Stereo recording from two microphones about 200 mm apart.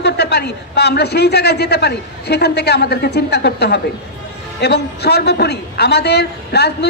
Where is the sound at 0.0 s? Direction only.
55° left (ahead or behind).